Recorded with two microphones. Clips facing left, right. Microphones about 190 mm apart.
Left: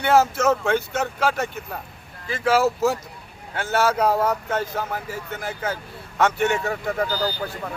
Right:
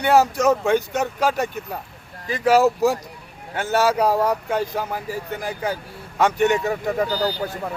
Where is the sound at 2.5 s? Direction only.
15° right (ahead or behind).